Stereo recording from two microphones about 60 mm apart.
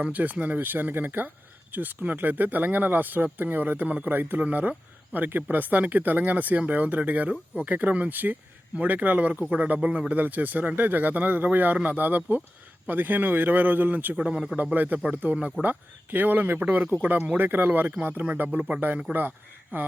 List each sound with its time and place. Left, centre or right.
0.0 s speech: right
14.2 s speech: centre
14.5 s speech: right